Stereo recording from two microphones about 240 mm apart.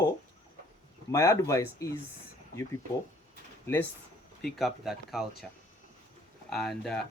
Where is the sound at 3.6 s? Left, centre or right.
Centre.